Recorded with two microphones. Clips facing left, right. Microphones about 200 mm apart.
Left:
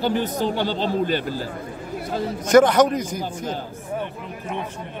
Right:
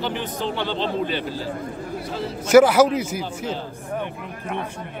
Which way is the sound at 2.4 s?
5° right (ahead or behind).